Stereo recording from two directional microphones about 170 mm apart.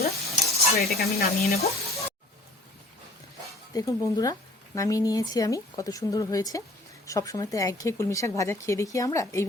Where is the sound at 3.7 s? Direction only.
20° left (ahead or behind).